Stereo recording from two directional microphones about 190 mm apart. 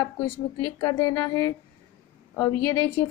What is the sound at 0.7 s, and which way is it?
A woman's voice, 15° left (ahead or behind).